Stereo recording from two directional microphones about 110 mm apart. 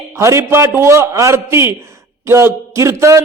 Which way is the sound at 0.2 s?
25° right (ahead or behind).